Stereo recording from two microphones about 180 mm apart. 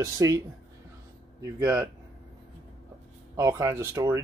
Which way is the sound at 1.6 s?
20° right (ahead or behind).